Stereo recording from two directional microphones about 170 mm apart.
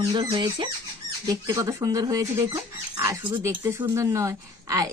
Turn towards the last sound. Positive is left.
turn(degrees=-20)  # may be behind; listen again after turning